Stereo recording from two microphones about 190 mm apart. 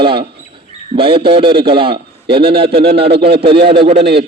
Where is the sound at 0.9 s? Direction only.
25° right (ahead or behind).